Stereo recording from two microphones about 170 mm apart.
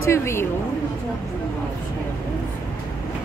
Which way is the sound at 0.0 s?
15° left (ahead or behind).